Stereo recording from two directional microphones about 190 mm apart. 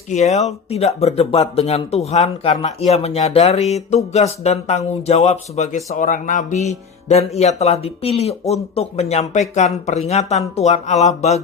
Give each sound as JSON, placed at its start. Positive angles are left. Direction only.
{"t": 0.1, "sound": "speech", "side_deg": 35}